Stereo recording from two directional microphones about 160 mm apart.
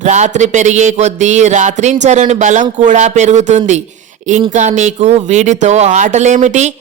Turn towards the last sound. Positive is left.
turn(degrees=-50)  # may be behind; listen again after turning